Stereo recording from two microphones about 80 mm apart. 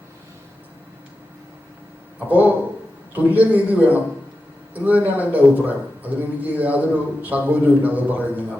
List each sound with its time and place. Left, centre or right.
2.1 s a man's voice: centre